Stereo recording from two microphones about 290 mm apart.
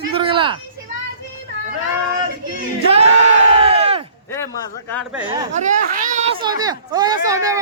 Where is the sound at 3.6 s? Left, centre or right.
Centre.